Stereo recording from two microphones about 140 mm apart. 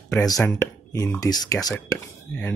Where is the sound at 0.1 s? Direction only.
25° left (ahead or behind).